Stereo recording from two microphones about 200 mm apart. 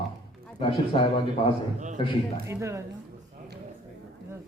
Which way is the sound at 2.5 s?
15° right (ahead or behind).